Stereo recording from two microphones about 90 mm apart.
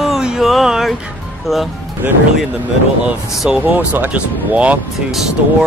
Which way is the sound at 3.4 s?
15° right (ahead or behind).